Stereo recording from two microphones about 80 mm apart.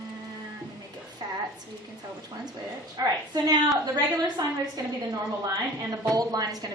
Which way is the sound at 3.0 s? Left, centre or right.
Right.